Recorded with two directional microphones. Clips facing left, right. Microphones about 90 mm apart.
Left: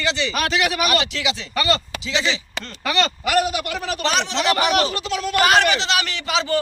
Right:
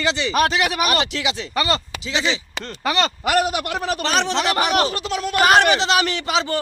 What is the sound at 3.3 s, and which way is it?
Speech, 20° right (ahead or behind).